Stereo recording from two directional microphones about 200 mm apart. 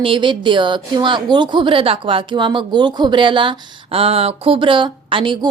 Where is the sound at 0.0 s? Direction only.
25° right (ahead or behind).